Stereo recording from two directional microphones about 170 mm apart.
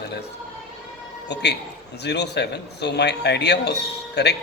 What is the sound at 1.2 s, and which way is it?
A man's voice, 85° left.